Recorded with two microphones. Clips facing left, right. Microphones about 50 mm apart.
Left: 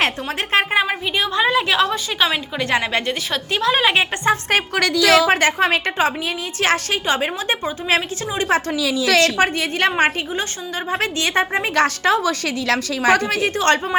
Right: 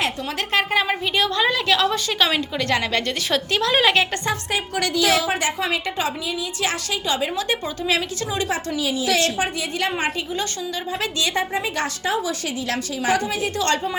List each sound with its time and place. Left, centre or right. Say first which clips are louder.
0.5 s a woman's voice: left 3 dB; left
0.9 s a woman's voice: even; centre
3.3 s a woman's voice: even; centre
4.4 s a woman's voice: left 6 dB; left
4.8 s a woman's voice: left 5 dB; left
8.7 s a woman's voice: left 4 dB; left
9.6 s a woman's voice: left 6 dB; left
11.0 s speech: left 4 dB; left
11.7 s a woman's voice: left 7 dB; left
13.6 s speech: left 4 dB; left